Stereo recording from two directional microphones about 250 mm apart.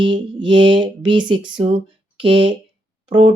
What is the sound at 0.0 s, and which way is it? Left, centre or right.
Speech, centre.